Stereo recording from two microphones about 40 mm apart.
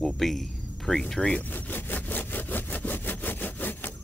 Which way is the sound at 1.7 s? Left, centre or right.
Left.